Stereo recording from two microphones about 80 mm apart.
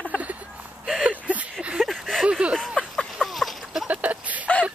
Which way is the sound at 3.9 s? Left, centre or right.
Centre.